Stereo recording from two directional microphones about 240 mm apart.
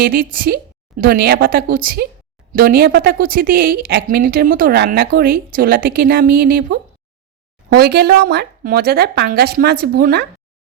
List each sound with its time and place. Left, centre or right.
0.0 s speech: right